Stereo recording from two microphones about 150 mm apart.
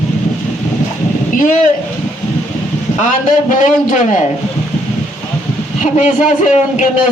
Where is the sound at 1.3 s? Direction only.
65° left (ahead or behind).